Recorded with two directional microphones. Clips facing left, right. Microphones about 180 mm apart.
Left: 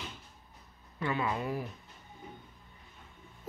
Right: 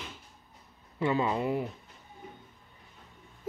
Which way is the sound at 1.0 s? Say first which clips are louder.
Right 5 dB; 25° right (ahead or behind).